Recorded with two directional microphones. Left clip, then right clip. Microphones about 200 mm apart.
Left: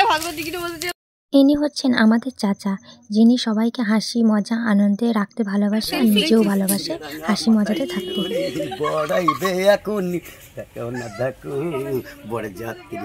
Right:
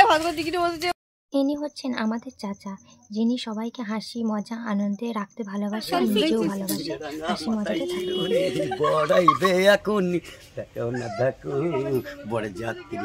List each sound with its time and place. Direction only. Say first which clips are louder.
0.0 s a woman's voice: right 1 dB; 50° right (ahead or behind)
1.3 s speech: left 9 dB; 35° left (ahead or behind)
5.9 s speech: left 1 dB; 20° right (ahead or behind)
6.3 s speech: left 7 dB; 30° left (ahead or behind)
8.1 s speech: right 3 dB; 20° right (ahead or behind); by 12.7 s 5° right (ahead or behind)